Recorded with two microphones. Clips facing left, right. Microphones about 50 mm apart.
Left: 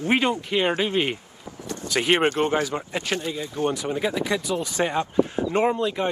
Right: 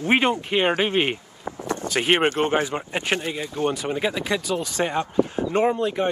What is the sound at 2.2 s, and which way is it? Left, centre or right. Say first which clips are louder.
Speech: right 1 dB; right.